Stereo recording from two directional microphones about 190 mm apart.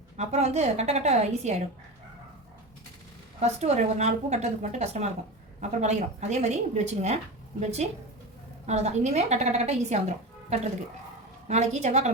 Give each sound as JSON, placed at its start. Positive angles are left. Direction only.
{"t": 0.2, "sound": "a woman's voice", "side_deg": -35}
{"t": 3.4, "sound": "a woman's voice", "side_deg": -35}